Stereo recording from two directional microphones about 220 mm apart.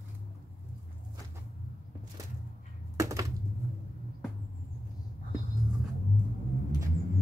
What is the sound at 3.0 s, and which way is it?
Computer keyboard, 15° right (ahead or behind).